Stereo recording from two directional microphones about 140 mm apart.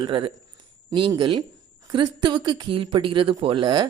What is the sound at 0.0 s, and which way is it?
Speech, 35° right (ahead or behind).